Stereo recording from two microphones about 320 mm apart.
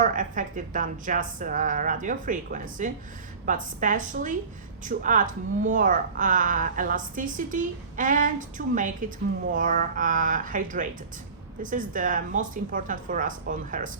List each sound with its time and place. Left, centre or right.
0.0 s a woman's voice: right